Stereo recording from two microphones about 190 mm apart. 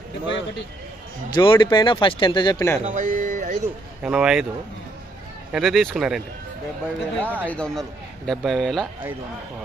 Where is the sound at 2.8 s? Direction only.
40° right (ahead or behind).